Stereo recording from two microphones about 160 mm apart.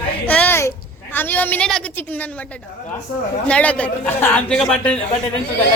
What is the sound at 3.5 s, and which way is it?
A man's voice, 10° left (ahead or behind).